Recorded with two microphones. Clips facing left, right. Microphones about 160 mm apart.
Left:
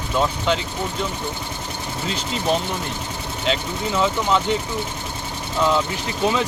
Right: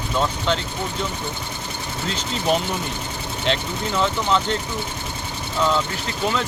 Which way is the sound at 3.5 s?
5° left (ahead or behind).